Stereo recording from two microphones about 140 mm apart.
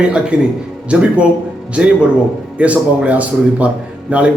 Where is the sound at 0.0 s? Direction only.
10° right (ahead or behind).